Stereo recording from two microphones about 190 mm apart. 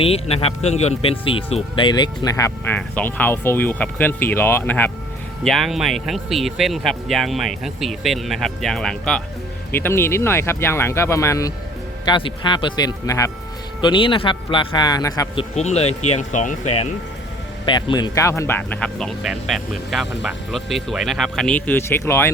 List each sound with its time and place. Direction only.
0.0 s a man's voice: 30° left (ahead or behind)
15.5 s speech: 35° left (ahead or behind)
17.7 s speech: 25° left (ahead or behind)